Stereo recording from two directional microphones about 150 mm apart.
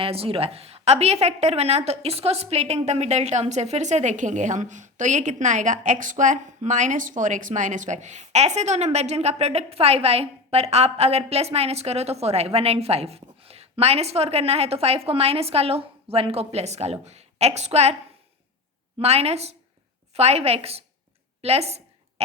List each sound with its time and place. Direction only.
0.0 s a woman's voice: 40° right (ahead or behind)
18.9 s a woman's voice: 45° right (ahead or behind)